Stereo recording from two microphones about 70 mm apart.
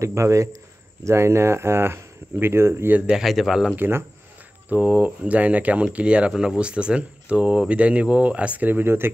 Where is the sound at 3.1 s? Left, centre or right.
Centre.